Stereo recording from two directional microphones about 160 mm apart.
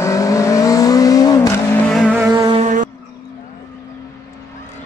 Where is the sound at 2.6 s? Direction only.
50° right (ahead or behind).